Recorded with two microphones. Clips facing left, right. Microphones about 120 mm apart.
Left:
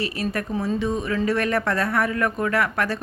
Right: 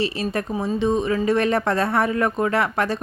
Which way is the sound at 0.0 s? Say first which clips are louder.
Right 3 dB; 25° right (ahead or behind).